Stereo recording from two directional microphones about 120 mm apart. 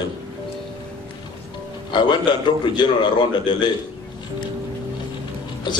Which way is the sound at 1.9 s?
40° left (ahead or behind).